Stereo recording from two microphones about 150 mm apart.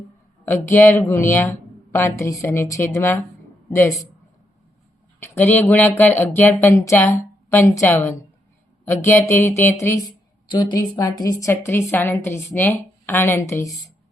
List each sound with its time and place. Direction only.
0.4 s speech: 15° left (ahead or behind)
5.2 s speech: 15° left (ahead or behind)
10.5 s a woman's voice: 25° left (ahead or behind)